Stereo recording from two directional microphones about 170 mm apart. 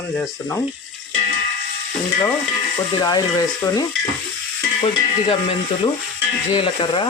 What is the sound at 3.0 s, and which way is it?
Speech, 25° left (ahead or behind).